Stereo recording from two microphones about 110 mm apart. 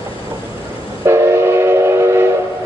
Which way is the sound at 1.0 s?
25° right (ahead or behind).